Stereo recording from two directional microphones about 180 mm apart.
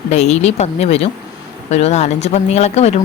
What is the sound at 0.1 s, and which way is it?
Speech, 40° left (ahead or behind).